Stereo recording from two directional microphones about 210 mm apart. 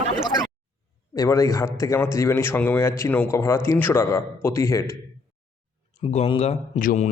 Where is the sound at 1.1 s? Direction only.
15° left (ahead or behind).